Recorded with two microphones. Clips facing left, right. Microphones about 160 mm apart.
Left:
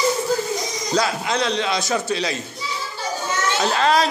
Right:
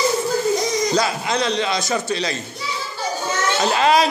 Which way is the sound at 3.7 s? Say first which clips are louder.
Right 2 dB; 10° right (ahead or behind).